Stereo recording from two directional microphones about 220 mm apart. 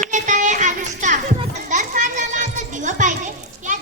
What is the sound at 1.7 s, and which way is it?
Children playing, 35° right (ahead or behind).